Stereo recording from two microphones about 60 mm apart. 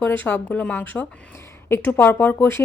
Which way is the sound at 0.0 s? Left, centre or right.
Left.